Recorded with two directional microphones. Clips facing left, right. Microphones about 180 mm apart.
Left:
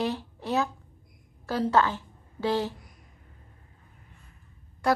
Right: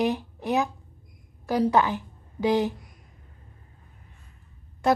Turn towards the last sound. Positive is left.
turn(degrees=-20)  # may be behind; listen again after turning